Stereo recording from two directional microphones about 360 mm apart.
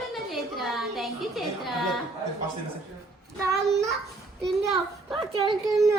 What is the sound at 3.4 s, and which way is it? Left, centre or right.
A woman's voice, centre.